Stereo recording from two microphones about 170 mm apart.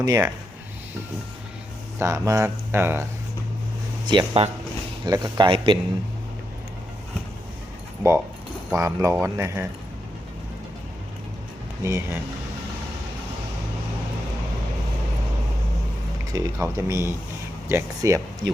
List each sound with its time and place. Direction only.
0.0 s speech: 20° right (ahead or behind)
2.0 s speech: 15° right (ahead or behind)
4.0 s speech: 25° right (ahead or behind)
8.7 s speech: 20° right (ahead or behind)
11.8 s speech: 15° right (ahead or behind)
16.3 s speech: 15° right (ahead or behind)